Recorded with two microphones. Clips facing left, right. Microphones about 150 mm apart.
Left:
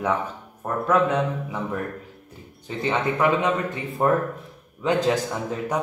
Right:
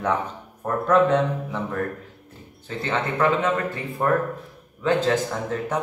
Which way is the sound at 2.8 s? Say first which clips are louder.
Left 1 dB; 15° left (ahead or behind).